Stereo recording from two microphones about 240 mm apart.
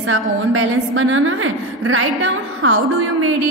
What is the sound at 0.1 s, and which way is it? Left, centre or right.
A woman's voice, right.